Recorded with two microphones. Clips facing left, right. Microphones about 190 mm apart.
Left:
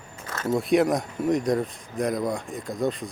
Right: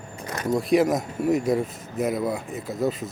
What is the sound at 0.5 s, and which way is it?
Speech, centre (ahead or behind).